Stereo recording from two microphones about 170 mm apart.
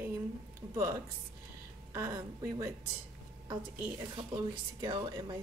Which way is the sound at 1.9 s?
20° right (ahead or behind).